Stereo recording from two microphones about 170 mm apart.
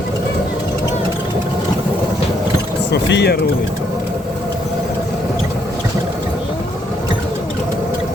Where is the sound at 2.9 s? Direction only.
85° left.